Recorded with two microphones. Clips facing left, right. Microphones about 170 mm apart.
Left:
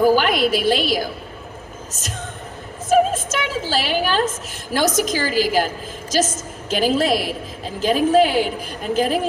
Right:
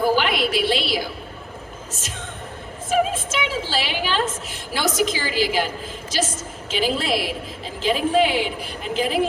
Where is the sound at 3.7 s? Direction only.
45° left (ahead or behind).